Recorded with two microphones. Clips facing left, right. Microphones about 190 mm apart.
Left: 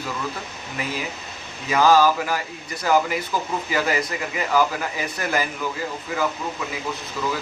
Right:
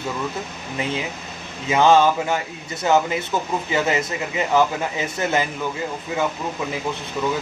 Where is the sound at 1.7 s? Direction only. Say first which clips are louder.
Right 1 dB; 25° right (ahead or behind).